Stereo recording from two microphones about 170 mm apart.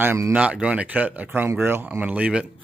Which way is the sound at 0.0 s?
10° right (ahead or behind).